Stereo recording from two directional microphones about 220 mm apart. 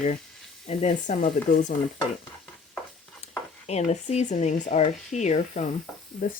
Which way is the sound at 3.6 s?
30° left (ahead or behind).